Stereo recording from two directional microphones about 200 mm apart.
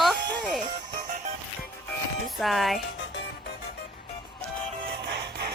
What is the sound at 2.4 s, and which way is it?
Speech, centre (ahead or behind).